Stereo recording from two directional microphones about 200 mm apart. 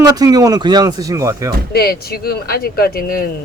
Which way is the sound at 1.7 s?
50° left (ahead or behind).